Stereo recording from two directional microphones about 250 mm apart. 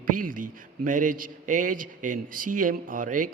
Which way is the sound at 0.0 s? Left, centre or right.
Right.